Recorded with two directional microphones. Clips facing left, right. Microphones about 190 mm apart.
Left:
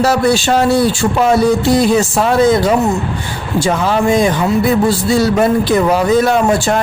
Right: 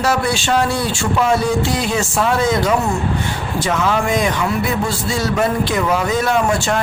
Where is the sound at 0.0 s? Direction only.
40° left (ahead or behind).